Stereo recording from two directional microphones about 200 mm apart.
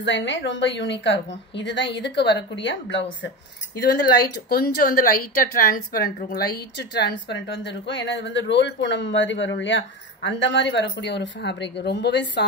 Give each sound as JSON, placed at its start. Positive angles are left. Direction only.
{"t": 0.0, "sound": "speech", "side_deg": 65}
{"t": 4.5, "sound": "a woman's voice", "side_deg": 50}